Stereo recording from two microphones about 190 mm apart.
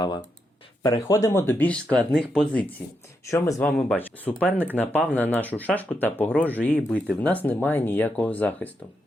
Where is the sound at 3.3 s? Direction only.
15° left (ahead or behind).